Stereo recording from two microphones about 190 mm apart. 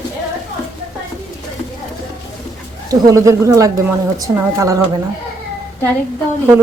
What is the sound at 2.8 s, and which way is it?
Speech, 20° right (ahead or behind).